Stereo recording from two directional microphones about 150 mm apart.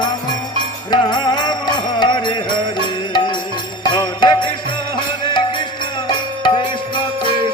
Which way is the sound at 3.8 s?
30° left (ahead or behind).